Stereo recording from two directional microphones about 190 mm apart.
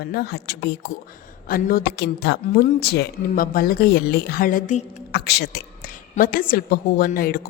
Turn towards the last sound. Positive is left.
turn(degrees=50)  # may be behind; listen again after turning